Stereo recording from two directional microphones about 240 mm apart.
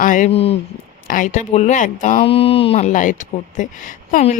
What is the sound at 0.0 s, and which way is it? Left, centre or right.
Speech, left.